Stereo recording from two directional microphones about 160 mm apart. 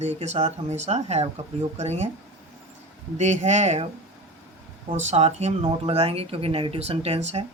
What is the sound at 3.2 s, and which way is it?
Speech, 45° right (ahead or behind).